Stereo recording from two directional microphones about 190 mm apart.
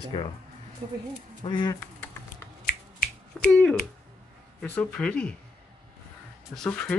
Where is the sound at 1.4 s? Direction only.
25° left (ahead or behind).